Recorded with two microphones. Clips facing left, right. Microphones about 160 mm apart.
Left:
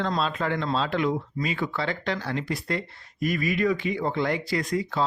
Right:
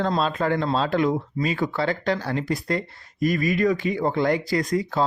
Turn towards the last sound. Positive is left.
turn(degrees=-40)  # may be behind; listen again after turning